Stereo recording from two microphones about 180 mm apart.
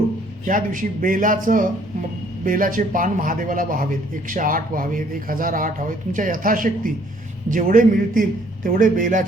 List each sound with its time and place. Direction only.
0.4 s a man's voice: 50° right (ahead or behind)